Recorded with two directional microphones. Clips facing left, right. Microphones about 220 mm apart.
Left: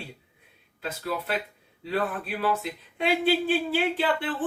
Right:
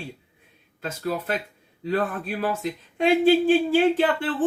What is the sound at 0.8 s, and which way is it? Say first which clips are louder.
A man's voice: right 4 dB; 45° right (ahead or behind).